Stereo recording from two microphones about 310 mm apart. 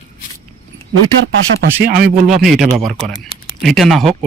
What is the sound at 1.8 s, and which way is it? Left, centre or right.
Speech, right.